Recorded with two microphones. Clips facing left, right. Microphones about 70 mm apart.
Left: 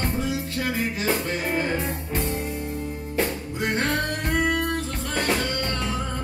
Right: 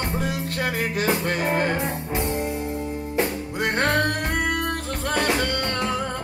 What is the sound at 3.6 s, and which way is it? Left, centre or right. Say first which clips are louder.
Music: right 3 dB; right.